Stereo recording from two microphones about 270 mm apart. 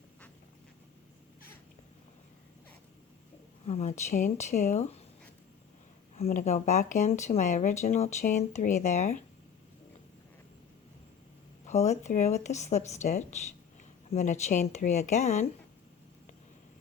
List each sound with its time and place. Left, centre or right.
3.7 s speech: left
6.1 s speech: left
11.6 s speech: left